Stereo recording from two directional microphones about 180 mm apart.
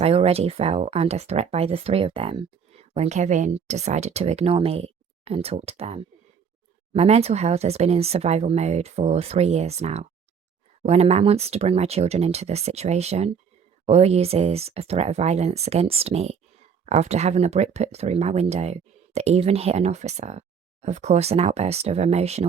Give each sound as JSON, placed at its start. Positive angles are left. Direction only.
{"t": 0.0, "sound": "speech", "side_deg": -35}